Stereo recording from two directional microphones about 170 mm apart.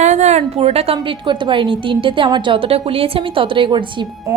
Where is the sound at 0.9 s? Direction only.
25° right (ahead or behind).